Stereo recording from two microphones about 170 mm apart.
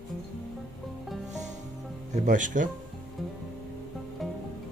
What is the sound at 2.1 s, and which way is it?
Speech, 45° right (ahead or behind).